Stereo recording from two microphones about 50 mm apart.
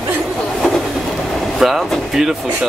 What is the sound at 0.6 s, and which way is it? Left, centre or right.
Vehicle, centre.